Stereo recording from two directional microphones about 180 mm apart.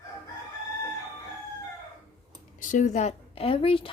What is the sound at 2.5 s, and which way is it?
A woman's voice, 45° left (ahead or behind).